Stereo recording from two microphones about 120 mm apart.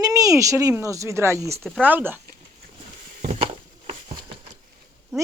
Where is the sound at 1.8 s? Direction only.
15° right (ahead or behind).